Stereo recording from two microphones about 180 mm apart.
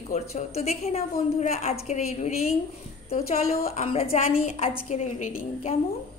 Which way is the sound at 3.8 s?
35° left (ahead or behind).